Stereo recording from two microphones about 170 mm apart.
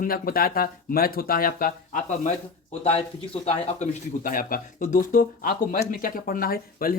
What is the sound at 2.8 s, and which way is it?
Speech, 35° left (ahead or behind).